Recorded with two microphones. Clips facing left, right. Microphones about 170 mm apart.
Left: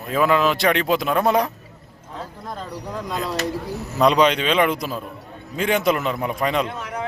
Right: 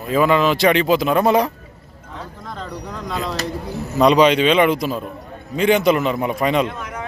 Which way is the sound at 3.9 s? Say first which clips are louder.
Right 4 dB; centre (ahead or behind).